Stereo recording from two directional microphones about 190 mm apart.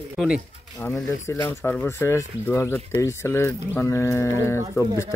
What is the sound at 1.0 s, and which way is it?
Speech, 15° left (ahead or behind).